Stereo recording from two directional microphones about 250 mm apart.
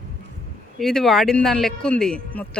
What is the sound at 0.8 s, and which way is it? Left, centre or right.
A man's voice, centre.